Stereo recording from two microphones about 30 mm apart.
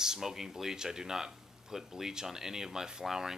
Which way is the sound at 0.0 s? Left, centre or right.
Centre.